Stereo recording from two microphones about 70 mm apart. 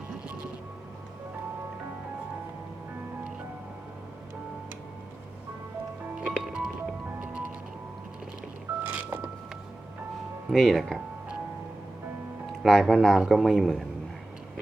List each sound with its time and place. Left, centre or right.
6.1 s music: centre
7.2 s music: right
8.8 s music: right
10.5 s a man's voice: centre
12.5 s a man's voice: centre